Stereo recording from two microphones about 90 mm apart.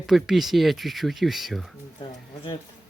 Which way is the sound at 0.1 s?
5° right (ahead or behind).